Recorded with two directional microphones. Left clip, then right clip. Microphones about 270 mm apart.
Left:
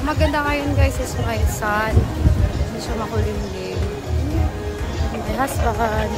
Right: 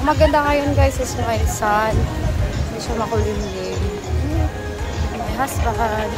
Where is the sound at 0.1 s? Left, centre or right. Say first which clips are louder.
Right 5 dB; centre.